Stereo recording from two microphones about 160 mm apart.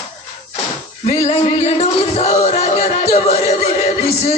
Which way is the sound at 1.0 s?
40° left (ahead or behind).